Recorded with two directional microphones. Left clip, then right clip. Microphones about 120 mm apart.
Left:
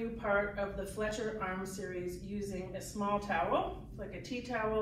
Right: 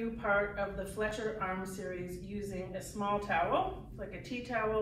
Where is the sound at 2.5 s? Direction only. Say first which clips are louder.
Right 1 dB; 5° right (ahead or behind).